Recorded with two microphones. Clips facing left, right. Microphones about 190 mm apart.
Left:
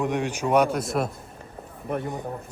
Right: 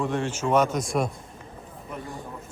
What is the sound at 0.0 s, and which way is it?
Speech, 15° left (ahead or behind).